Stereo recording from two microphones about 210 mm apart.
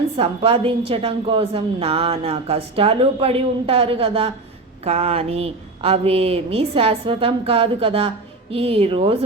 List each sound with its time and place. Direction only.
0.2 s speech: 25° right (ahead or behind)